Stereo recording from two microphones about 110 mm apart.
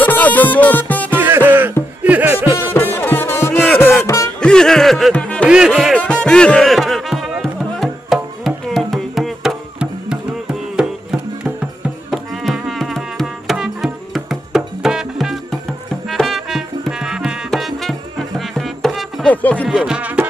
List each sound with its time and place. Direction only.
0.0 s music: 15° left (ahead or behind)
1.1 s music: 20° right (ahead or behind)
2.7 s music: 20° left (ahead or behind)
4.4 s music: 5° left (ahead or behind)
19.2 s music: 15° left (ahead or behind)
19.7 s music: 10° right (ahead or behind)